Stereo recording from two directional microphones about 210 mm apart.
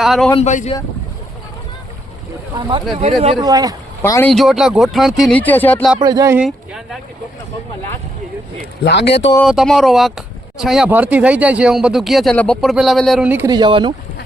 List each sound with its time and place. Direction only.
0.0 s speech: centre (ahead or behind)
0.3 s speech: 35° left (ahead or behind)
2.6 s speech: 20° right (ahead or behind)
3.4 s speech: 15° right (ahead or behind)
4.0 s speech: 15° left (ahead or behind)
4.3 s speech: centre (ahead or behind)
6.0 s speech: 20° right (ahead or behind)
6.4 s speech: centre (ahead or behind)
8.8 s speech: 55° left (ahead or behind)
9.4 s speech: centre (ahead or behind); by 13.9 s 20° right (ahead or behind)